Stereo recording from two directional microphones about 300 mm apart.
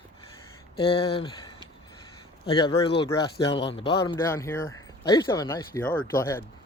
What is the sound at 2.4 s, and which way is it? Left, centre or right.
Speech, centre.